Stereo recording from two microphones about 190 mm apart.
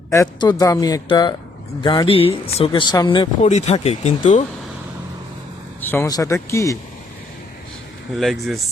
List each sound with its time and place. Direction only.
0.1 s speech: 20° left (ahead or behind)
3.4 s speech: 35° left (ahead or behind)
5.8 s speech: 10° left (ahead or behind)
8.1 s speech: centre (ahead or behind)